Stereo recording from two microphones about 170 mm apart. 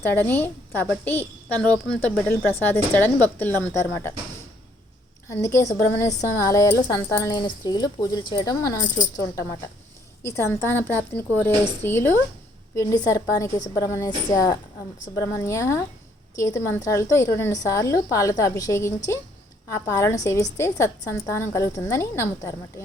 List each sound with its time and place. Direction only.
0.0 s a woman's voice: 10° left (ahead or behind)
5.3 s a woman's voice: 20° left (ahead or behind)